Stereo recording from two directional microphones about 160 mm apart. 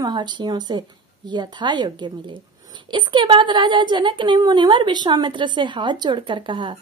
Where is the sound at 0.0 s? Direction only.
25° right (ahead or behind).